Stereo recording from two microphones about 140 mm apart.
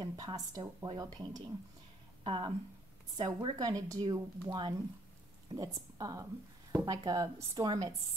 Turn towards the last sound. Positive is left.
turn(degrees=-25)  # may be behind; listen again after turning